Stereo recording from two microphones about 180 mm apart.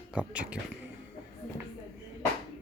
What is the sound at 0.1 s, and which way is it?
Speech, 5° right (ahead or behind).